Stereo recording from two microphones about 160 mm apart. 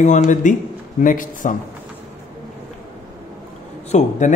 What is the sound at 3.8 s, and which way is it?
Speech, 45° left (ahead or behind).